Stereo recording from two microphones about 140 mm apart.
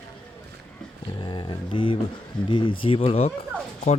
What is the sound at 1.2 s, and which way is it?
Speech, 35° left (ahead or behind).